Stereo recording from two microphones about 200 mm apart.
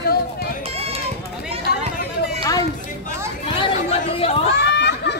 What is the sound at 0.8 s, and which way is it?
Run, 30° right (ahead or behind).